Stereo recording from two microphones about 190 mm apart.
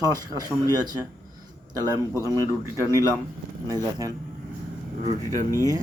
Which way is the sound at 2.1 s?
20° right (ahead or behind).